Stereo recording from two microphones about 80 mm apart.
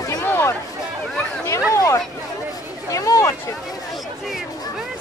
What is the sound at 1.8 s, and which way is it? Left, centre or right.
Chatter, left.